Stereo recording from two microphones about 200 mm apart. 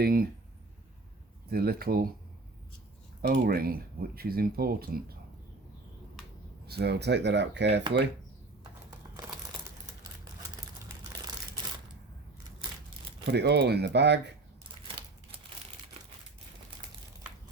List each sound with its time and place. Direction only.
0.0 s speech: 45° right (ahead or behind)
1.5 s speech: 50° right (ahead or behind)
3.2 s speech: 50° right (ahead or behind)
6.7 s speech: 55° right (ahead or behind)
10.6 s crumpling: 15° right (ahead or behind)
13.3 s speech: 55° right (ahead or behind)